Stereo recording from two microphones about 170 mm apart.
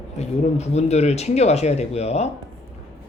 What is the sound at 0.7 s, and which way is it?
Speech, 40° left (ahead or behind).